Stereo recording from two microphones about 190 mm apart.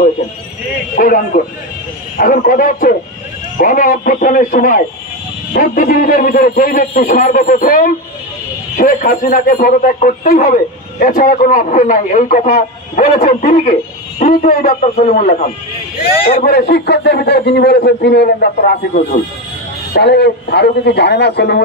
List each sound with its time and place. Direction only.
0.9 s a man's voice: 50° left (ahead or behind)
19.9 s a man's voice: 60° left (ahead or behind)